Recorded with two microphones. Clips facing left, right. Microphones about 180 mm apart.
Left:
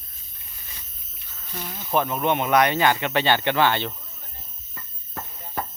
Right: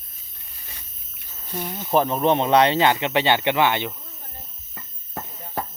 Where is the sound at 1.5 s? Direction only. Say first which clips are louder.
Right 4 dB; 25° right (ahead or behind).